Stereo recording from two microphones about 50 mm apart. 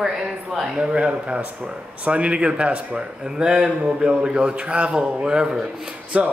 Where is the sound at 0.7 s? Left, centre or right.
Centre.